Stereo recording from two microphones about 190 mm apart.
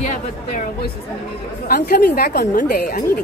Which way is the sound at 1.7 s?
50° left (ahead or behind).